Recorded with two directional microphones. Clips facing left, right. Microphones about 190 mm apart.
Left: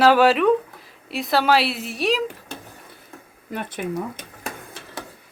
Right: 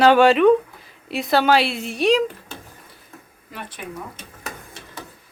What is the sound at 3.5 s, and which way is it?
Speech, 55° left (ahead or behind).